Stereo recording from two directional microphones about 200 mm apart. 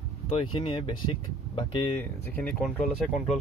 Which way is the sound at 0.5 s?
25° left (ahead or behind).